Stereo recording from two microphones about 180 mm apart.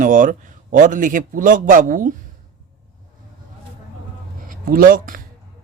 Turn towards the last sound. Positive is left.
turn(degrees=-50)  # may be behind; listen again after turning